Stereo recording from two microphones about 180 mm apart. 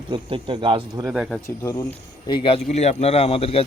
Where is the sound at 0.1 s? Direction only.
30° right (ahead or behind).